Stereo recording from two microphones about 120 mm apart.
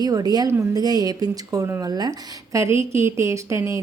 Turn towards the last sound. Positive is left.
turn(degrees=-25)  # may be behind; listen again after turning